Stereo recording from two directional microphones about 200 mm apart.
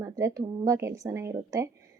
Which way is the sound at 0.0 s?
15° right (ahead or behind).